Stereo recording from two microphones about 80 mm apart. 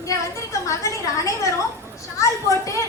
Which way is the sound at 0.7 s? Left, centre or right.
Left.